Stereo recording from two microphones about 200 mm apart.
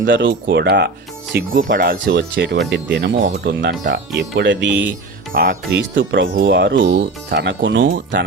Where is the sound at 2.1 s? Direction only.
65° right (ahead or behind).